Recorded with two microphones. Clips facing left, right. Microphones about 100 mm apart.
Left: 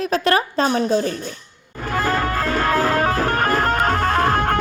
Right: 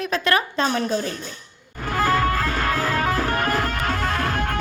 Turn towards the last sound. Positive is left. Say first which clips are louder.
# left 6 dB
turn(degrees=45)  # may be behind; listen again after turning